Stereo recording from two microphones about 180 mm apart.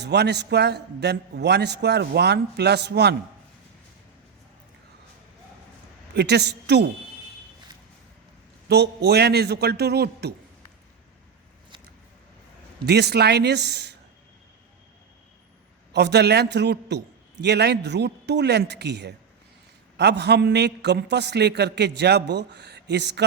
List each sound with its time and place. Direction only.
0.0 s a man's voice: 70° right (ahead or behind)
6.1 s a man's voice: 70° right (ahead or behind)
8.7 s a man's voice: 65° right (ahead or behind)
12.8 s a man's voice: 65° right (ahead or behind)
15.9 s a man's voice: 70° right (ahead or behind)